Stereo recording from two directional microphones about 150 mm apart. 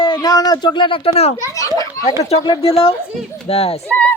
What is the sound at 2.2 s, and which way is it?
A woman's voice, 40° left (ahead or behind).